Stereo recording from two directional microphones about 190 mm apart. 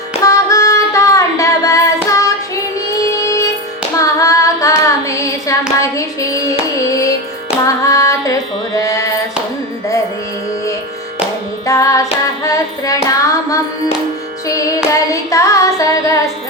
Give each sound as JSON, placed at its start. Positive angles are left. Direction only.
{"t": 0.2, "sound": "female singing", "side_deg": 15}
{"t": 3.2, "sound": "music", "side_deg": 15}
{"t": 4.0, "sound": "singing", "side_deg": 15}
{"t": 7.6, "sound": "female singing", "side_deg": 15}
{"t": 8.8, "sound": "a sound", "side_deg": 15}
{"t": 11.6, "sound": "music", "side_deg": 15}
{"t": 14.9, "sound": "singing", "side_deg": 15}